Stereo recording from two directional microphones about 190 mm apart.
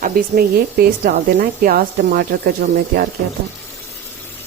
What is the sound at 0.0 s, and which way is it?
Speech, 50° right (ahead or behind).